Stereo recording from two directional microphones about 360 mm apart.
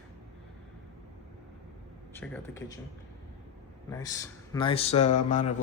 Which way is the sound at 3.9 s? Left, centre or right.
Centre.